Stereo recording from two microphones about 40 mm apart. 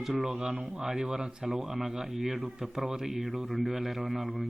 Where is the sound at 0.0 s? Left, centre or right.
Centre.